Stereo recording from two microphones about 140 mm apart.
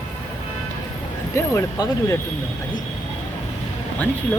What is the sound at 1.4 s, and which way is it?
Speech, 20° left (ahead or behind).